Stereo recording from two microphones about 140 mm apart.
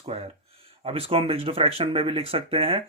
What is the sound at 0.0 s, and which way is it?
Speech, 45° right (ahead or behind).